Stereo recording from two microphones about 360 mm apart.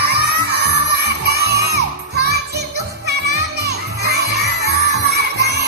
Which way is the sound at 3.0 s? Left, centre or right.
Right.